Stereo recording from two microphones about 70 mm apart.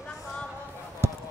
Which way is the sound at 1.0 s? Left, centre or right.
Right.